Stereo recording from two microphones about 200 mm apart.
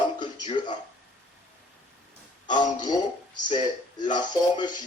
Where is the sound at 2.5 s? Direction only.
20° left (ahead or behind).